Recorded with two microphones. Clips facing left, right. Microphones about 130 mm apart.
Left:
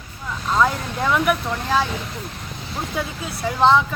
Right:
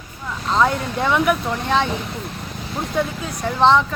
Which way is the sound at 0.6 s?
Centre (ahead or behind).